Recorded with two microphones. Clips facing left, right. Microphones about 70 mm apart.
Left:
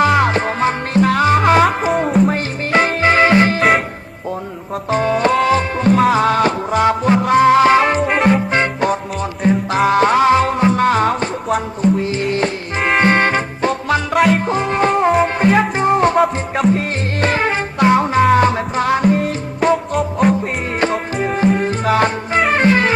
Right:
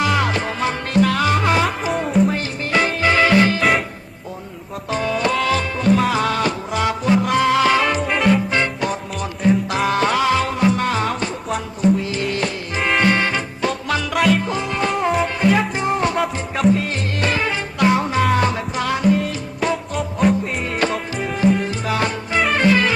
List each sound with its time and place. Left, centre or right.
0.0 s music: left
4.9 s music: left
17.2 s music: left
21.2 s music: left